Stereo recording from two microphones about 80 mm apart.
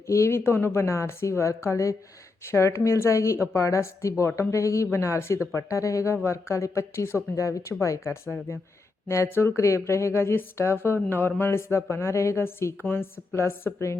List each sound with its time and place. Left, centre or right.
0.1 s speech: left